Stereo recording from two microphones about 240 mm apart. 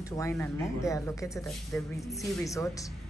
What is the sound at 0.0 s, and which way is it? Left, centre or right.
Speech, centre.